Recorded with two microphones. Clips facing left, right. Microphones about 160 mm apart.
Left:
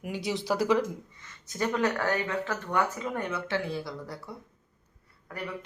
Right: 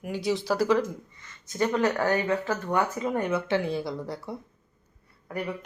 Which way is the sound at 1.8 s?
30° right (ahead or behind).